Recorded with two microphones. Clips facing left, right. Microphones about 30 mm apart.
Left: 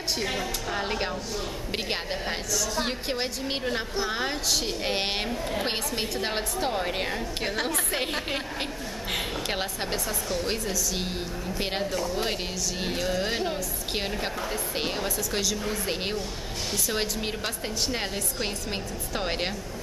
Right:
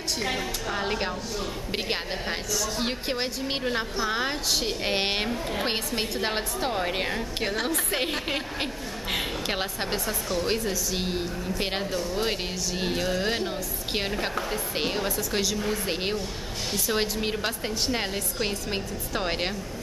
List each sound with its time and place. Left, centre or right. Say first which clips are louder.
0.2 s a woman's voice: right 1 dB; centre
10.6 s a woman's voice: right 1 dB; centre
11.0 s a woman's voice: right 2 dB; centre